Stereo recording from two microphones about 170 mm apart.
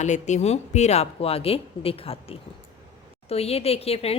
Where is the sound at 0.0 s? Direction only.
45° left (ahead or behind).